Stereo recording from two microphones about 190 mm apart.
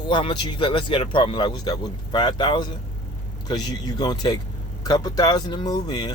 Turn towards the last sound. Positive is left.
turn(degrees=20)  # may be behind; listen again after turning